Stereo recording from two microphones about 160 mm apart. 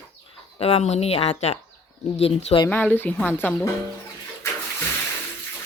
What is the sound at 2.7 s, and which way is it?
Speech, 10° left (ahead or behind).